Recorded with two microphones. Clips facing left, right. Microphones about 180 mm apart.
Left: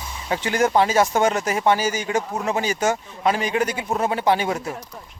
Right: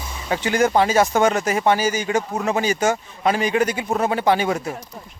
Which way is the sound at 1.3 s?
25° left (ahead or behind).